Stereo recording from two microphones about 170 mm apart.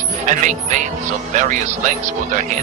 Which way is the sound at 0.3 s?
45° right (ahead or behind).